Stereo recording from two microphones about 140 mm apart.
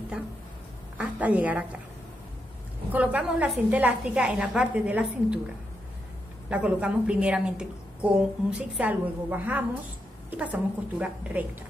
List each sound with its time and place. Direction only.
0.9 s a woman's voice: 10° right (ahead or behind)
2.9 s a woman's voice: 10° right (ahead or behind)
6.5 s a woman's voice: 10° right (ahead or behind)